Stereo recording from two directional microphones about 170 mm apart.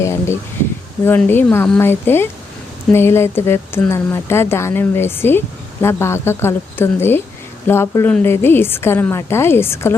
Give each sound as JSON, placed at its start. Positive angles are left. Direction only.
{"t": 0.0, "sound": "speech", "side_deg": 15}